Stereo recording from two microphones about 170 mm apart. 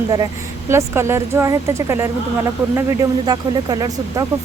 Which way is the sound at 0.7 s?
15° right (ahead or behind).